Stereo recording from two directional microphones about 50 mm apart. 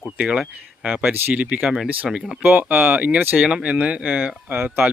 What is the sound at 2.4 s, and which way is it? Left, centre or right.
Speech, right.